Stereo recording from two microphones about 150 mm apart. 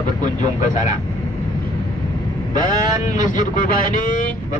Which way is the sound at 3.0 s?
60° left (ahead or behind).